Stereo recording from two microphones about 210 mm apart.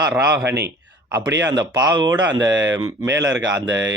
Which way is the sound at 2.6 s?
60° right (ahead or behind).